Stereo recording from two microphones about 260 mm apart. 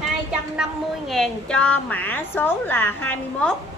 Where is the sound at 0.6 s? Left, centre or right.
Centre.